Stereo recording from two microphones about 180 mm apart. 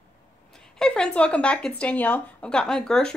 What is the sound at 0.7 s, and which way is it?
Speech, 5° left (ahead or behind).